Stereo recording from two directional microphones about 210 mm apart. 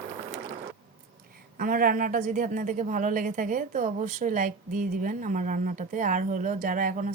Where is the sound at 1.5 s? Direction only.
40° right (ahead or behind).